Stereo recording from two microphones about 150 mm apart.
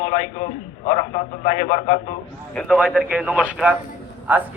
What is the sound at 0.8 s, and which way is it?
A man's voice, 45° left (ahead or behind).